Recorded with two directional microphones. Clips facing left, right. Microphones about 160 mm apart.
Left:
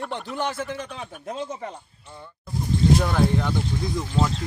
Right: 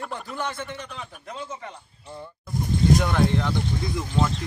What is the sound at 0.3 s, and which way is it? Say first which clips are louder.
Speech: left 4 dB; 30° left (ahead or behind).